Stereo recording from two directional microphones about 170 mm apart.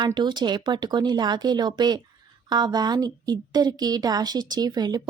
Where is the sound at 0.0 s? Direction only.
25° right (ahead or behind).